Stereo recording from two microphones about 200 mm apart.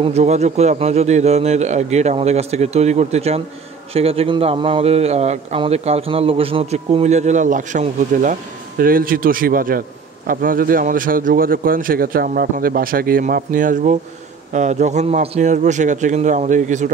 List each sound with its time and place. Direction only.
0.0 s a man's voice: 35° right (ahead or behind)